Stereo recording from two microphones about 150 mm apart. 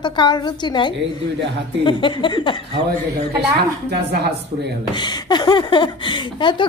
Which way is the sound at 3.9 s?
90° right.